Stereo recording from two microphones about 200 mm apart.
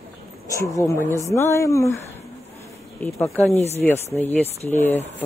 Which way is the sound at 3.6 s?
30° left (ahead or behind).